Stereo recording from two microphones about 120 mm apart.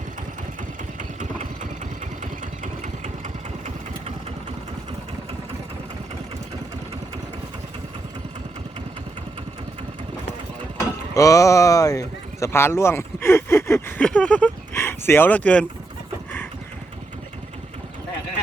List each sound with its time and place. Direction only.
0.9 s engine: 90° right
10.8 s speech: 30° left (ahead or behind)
14.0 s speech: 10° left (ahead or behind)
14.7 s a sound: 20° left (ahead or behind)